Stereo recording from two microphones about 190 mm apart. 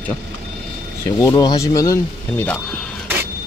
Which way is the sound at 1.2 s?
20° left (ahead or behind).